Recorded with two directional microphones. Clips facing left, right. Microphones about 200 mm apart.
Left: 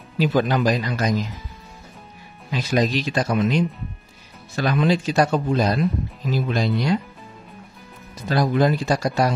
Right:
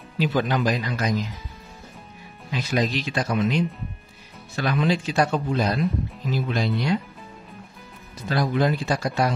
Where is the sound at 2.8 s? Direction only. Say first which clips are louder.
Left 4 dB; 40° left (ahead or behind).